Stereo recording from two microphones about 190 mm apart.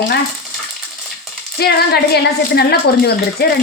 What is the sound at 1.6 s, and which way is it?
A woman's voice, 55° left (ahead or behind).